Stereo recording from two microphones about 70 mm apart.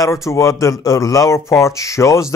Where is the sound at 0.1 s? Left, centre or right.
Left.